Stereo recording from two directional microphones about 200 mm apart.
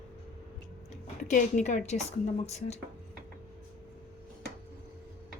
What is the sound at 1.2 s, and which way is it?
A woman's voice, 40° left (ahead or behind).